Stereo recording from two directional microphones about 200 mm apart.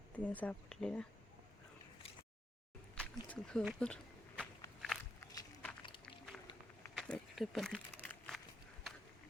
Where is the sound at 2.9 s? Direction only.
5° left (ahead or behind).